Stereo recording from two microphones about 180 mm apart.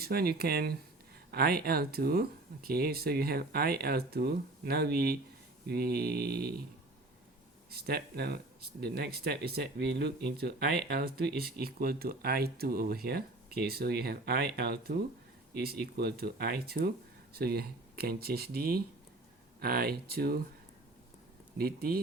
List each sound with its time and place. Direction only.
0.0 s speech: 60° right (ahead or behind)
7.7 s speech: 60° right (ahead or behind)
21.6 s speech: 55° right (ahead or behind)